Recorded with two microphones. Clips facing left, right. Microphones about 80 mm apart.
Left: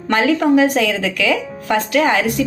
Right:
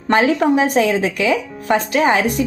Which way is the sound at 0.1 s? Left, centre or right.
Right.